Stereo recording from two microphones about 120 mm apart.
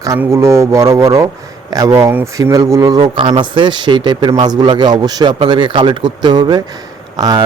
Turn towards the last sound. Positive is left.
turn(degrees=-35)  # may be behind; listen again after turning